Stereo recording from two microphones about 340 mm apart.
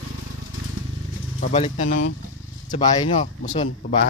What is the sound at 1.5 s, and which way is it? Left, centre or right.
Speech, centre.